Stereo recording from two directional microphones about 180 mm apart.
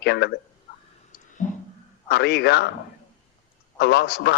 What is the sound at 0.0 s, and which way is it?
Speech, 65° left (ahead or behind).